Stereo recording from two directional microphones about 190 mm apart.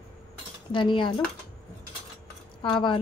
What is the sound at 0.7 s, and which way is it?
Speech, 25° left (ahead or behind).